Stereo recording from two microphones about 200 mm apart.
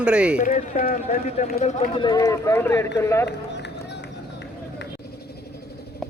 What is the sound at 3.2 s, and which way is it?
Run, 60° left (ahead or behind).